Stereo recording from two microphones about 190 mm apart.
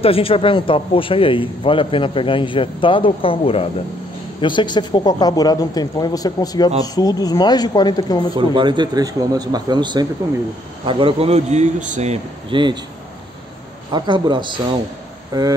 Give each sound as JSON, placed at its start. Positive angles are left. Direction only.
{"t": 0.0, "sound": "speech", "side_deg": 30}
{"t": 8.4, "sound": "a man's voice", "side_deg": -25}
{"t": 13.9, "sound": "speech", "side_deg": -25}